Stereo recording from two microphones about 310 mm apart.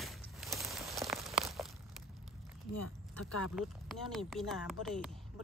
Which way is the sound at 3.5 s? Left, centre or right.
Centre.